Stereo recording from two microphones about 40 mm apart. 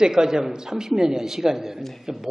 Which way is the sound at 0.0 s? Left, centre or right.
Centre.